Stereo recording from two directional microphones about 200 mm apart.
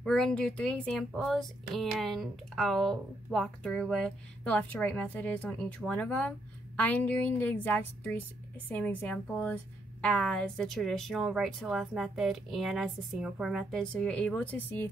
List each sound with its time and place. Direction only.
0.0 s a woman's voice: 5° left (ahead or behind)